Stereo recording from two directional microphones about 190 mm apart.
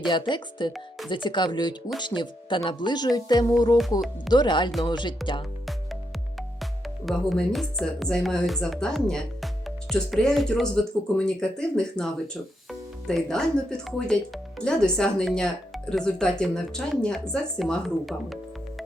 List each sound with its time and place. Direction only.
0.1 s speech: 25° left (ahead or behind)
0.7 s speech: centre (ahead or behind)
1.1 s speech: 25° left (ahead or behind)
6.6 s speech: centre (ahead or behind)